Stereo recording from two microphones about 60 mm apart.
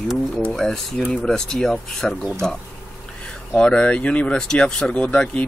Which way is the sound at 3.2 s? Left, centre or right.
Centre.